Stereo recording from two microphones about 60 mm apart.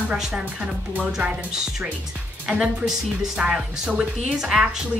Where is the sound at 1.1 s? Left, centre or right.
Centre.